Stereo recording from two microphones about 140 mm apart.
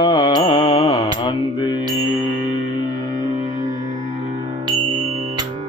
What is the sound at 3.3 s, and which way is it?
Music, 35° right (ahead or behind).